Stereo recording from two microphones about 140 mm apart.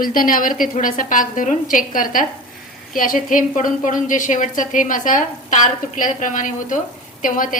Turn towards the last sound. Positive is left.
turn(degrees=70)  # may be behind; listen again after turning